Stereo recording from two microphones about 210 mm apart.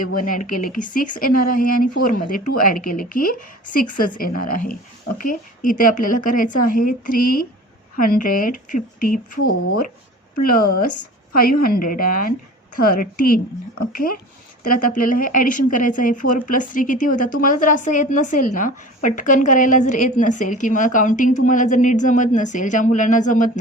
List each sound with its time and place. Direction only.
0.1 s speech: 40° left (ahead or behind)
10.4 s speech: 45° left (ahead or behind)